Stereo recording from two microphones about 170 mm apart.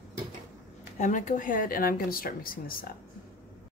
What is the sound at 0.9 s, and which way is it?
Speech, 45° left (ahead or behind).